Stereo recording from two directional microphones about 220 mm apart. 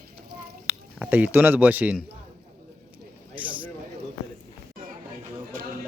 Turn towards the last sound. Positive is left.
turn(degrees=-40)  # may be behind; listen again after turning